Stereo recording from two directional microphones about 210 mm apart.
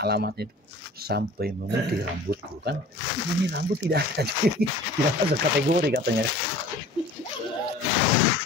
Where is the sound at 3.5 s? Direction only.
50° right (ahead or behind).